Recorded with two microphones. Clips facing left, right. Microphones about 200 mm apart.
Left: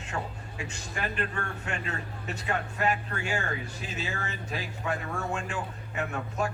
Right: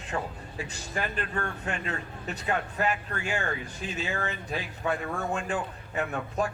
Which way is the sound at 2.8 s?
35° left (ahead or behind).